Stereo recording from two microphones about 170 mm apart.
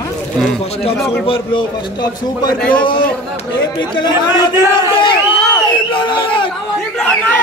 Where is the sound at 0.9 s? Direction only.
Centre (ahead or behind).